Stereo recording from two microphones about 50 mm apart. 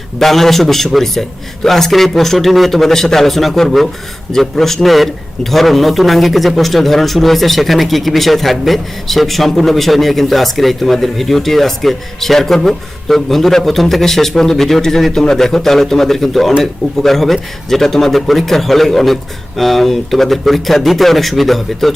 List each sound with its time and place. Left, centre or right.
0.2 s a man's voice: centre